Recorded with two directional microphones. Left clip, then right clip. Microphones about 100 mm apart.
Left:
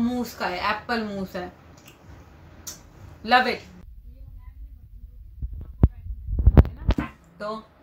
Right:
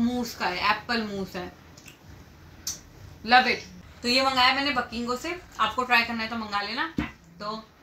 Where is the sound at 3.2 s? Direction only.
5° left (ahead or behind).